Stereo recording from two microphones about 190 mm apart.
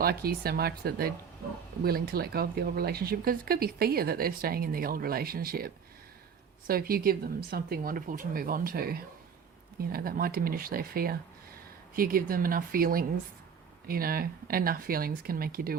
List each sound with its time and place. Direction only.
0.0 s speech: 55° right (ahead or behind)